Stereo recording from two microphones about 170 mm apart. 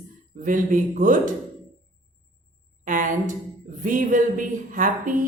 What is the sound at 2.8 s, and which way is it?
Speech, 50° right (ahead or behind).